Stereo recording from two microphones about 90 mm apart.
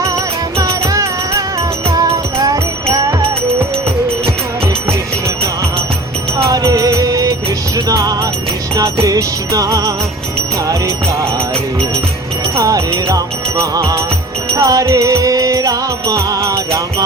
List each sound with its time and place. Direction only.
0.6 s music: 35° right (ahead or behind)
6.3 s music: 30° right (ahead or behind)
12.5 s music: 35° right (ahead or behind)